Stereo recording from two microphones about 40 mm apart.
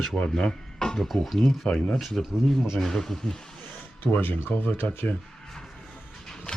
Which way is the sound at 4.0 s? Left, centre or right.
Left.